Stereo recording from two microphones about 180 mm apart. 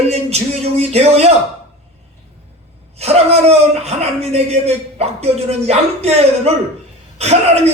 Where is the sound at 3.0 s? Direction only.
35° right (ahead or behind).